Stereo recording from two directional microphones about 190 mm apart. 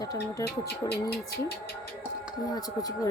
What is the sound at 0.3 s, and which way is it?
Speech, 15° left (ahead or behind).